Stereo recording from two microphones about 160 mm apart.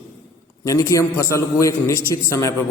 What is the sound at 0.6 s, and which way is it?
A man's voice, 20° left (ahead or behind).